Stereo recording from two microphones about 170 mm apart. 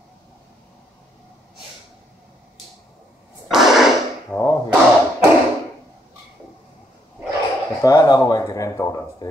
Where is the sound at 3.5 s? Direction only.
Centre (ahead or behind).